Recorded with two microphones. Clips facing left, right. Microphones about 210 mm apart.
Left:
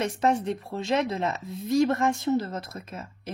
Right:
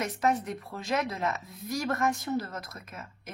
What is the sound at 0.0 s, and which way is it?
Speech, 30° left (ahead or behind).